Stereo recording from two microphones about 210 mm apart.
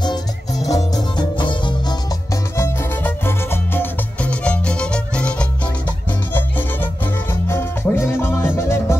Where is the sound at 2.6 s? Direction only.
10° left (ahead or behind).